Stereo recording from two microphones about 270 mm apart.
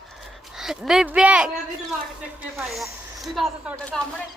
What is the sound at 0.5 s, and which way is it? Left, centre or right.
Speech, centre.